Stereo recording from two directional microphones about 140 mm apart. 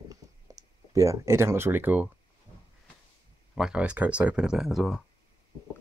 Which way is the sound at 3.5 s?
5° right (ahead or behind).